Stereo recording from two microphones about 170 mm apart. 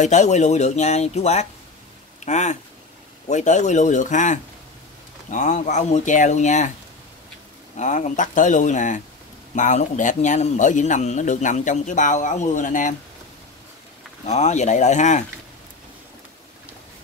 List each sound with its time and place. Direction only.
0.0 s a man's voice: 45° left (ahead or behind)
7.7 s a man's voice: 45° left (ahead or behind)
14.2 s a man's voice: 40° left (ahead or behind)